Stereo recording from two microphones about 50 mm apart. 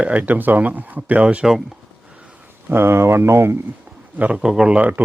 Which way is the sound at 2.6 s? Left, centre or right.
Right.